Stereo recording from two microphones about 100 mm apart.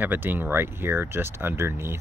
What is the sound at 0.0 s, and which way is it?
Speech, 20° right (ahead or behind).